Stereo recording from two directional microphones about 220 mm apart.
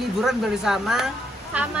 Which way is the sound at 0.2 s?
Centre (ahead or behind).